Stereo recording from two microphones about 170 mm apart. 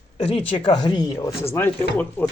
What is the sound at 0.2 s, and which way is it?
Speech, 35° left (ahead or behind).